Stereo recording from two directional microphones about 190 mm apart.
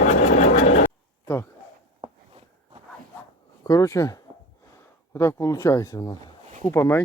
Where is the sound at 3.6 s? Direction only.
15° left (ahead or behind).